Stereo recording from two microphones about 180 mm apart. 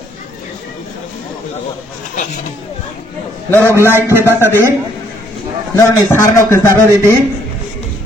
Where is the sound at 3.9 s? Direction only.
10° right (ahead or behind).